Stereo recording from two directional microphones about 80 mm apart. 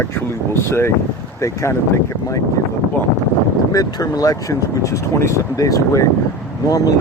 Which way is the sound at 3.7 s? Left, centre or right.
Left.